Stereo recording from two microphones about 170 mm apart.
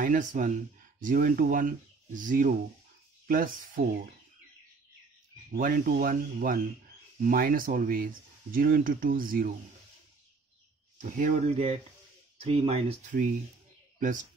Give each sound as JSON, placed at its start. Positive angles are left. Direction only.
{"t": 0.0, "sound": "speech", "side_deg": -50}
{"t": 5.5, "sound": "speech", "side_deg": -60}
{"t": 11.0, "sound": "speech", "side_deg": -50}
{"t": 13.9, "sound": "speech", "side_deg": -50}